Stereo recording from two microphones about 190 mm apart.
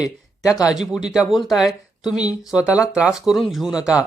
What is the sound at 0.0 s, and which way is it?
Speech, 20° left (ahead or behind).